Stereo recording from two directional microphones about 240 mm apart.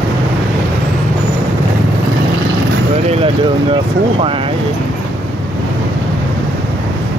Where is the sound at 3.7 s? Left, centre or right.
Right.